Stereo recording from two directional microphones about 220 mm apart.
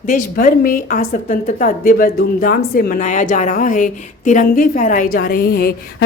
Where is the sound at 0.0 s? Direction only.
35° left (ahead or behind).